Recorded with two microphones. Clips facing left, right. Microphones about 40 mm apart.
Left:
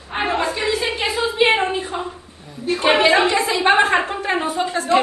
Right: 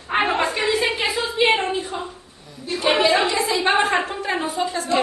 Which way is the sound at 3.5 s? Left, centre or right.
Centre.